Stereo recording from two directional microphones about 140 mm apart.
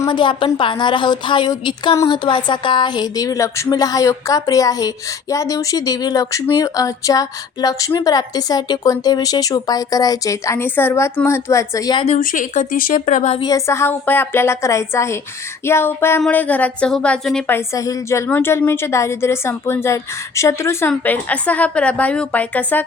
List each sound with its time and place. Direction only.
0.0 s a woman's voice: 35° left (ahead or behind)
12.2 s a woman's voice: 70° left (ahead or behind)
13.4 s a woman's voice: 25° left (ahead or behind)
17.7 s a woman's voice: 25° left (ahead or behind)